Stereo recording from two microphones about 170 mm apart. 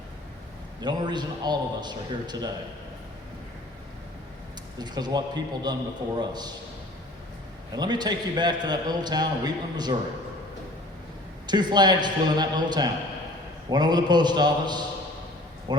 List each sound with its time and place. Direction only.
0.8 s a man's voice: 25° right (ahead or behind)
4.8 s a man's voice: 25° right (ahead or behind)
7.7 s a man's voice: 25° right (ahead or behind)
11.4 s a man's voice: 25° right (ahead or behind)